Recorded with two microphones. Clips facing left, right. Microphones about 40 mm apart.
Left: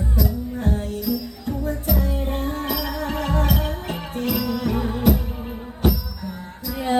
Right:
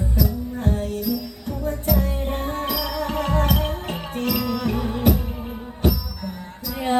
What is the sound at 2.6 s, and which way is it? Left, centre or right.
Music, left.